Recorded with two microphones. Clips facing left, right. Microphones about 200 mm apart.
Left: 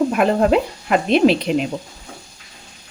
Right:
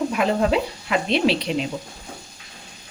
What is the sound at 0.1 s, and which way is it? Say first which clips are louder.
Speech: left 5 dB; 50° left (ahead or behind).